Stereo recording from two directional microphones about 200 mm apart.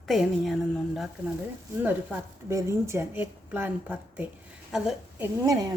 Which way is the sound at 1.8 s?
10° right (ahead or behind).